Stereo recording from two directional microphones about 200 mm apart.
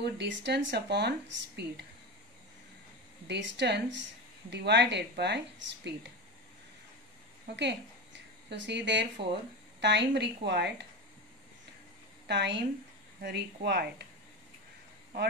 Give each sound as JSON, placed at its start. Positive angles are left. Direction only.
{"t": 0.0, "sound": "a woman's voice", "side_deg": -60}
{"t": 3.3, "sound": "a woman's voice", "side_deg": -60}
{"t": 7.4, "sound": "a woman's voice", "side_deg": -60}
{"t": 12.3, "sound": "a woman's voice", "side_deg": -60}